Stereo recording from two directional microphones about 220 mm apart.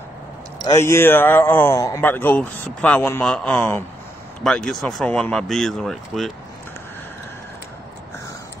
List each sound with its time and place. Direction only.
0.7 s a man's voice: 10° left (ahead or behind)